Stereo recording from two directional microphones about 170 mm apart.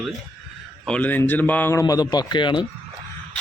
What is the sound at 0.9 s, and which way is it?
Speech, 10° left (ahead or behind).